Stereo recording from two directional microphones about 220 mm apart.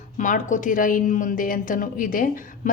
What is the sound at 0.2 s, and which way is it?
A woman's voice, 35° left (ahead or behind).